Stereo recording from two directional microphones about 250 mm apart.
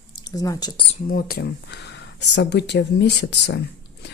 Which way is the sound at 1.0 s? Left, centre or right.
Left.